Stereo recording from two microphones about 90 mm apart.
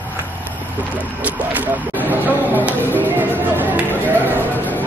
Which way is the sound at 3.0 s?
20° right (ahead or behind).